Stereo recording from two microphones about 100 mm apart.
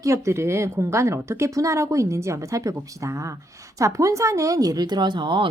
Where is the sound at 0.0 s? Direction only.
30° right (ahead or behind).